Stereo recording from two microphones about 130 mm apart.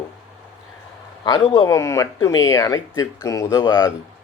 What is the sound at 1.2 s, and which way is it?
A man's voice, 35° left (ahead or behind).